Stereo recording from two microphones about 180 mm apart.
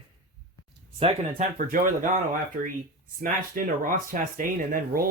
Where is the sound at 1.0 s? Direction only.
40° right (ahead or behind).